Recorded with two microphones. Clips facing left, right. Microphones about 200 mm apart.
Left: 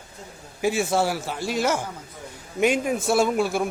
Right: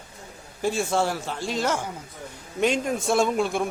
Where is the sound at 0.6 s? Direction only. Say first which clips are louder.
Left 2 dB; 5° left (ahead or behind).